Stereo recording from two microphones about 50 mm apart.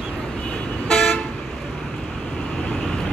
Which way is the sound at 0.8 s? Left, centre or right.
Centre.